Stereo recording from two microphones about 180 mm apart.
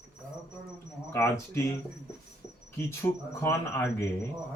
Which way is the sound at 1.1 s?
15° left (ahead or behind).